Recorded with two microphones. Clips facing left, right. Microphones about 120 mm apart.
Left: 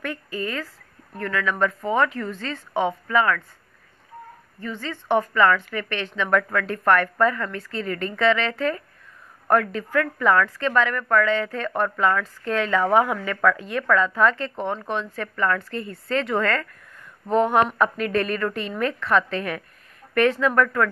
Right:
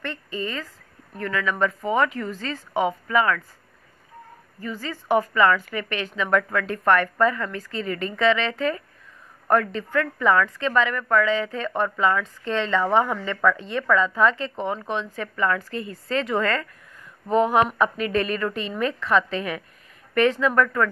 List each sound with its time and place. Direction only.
0.0 s a woman's voice: 5° left (ahead or behind)
5.0 s a woman's voice: 5° right (ahead or behind)